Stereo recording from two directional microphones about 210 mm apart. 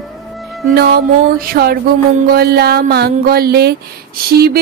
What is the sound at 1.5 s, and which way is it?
Speech, 45° right (ahead or behind).